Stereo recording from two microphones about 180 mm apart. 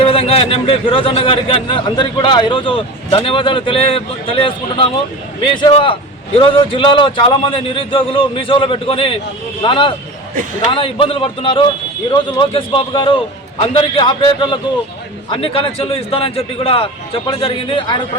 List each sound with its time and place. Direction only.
0.0 s a man's voice: 35° left (ahead or behind)